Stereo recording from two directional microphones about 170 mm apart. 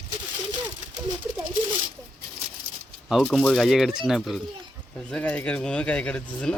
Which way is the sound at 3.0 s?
Centre (ahead or behind).